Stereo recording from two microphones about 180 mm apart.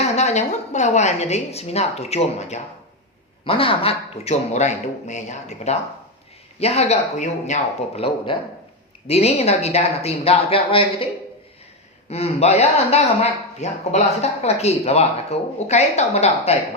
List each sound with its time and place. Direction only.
0.0 s speech: 40° left (ahead or behind)